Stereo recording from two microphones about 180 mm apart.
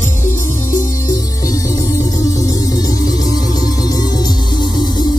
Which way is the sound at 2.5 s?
20° left (ahead or behind).